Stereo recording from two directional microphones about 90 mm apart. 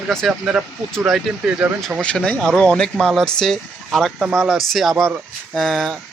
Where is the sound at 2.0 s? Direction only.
15° left (ahead or behind).